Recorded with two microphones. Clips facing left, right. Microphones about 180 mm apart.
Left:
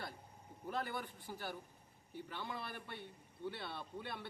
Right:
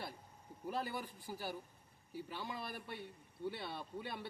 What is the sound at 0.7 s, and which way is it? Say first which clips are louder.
A man's voice: even; 10° right (ahead or behind).